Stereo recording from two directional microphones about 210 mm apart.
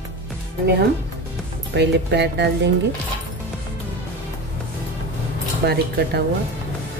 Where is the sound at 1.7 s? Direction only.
55° right (ahead or behind).